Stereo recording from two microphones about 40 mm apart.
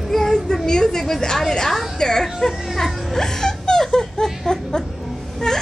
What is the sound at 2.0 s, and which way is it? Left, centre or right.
Speech, centre.